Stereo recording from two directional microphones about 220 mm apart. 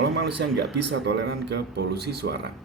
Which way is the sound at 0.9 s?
50° right (ahead or behind).